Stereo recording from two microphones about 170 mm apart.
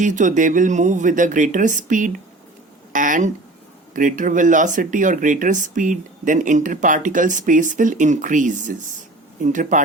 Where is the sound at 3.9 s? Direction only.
50° right (ahead or behind).